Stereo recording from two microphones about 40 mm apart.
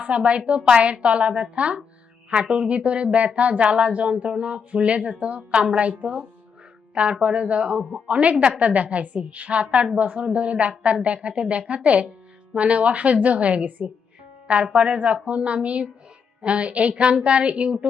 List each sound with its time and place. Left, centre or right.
0.0 s a woman's voice: right
14.4 s a woman's voice: right